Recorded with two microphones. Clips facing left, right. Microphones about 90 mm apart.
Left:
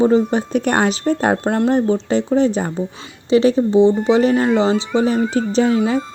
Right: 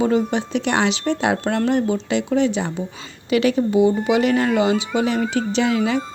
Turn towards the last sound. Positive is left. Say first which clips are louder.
# left 3 dB
turn(degrees=35)  # may be behind; listen again after turning